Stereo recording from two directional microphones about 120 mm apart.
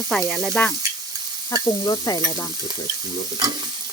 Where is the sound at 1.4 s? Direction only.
35° left (ahead or behind).